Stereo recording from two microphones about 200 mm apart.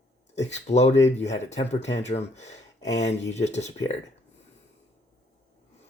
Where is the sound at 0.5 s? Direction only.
35° left (ahead or behind).